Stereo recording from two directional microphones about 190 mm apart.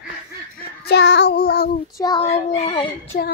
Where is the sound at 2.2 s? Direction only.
35° left (ahead or behind).